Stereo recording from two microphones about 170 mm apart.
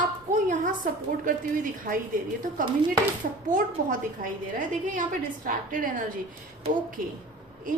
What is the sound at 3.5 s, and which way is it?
A woman's voice, 50° right (ahead or behind).